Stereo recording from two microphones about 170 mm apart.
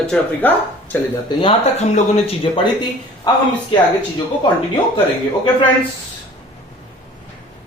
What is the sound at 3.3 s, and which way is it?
Speech, 25° left (ahead or behind).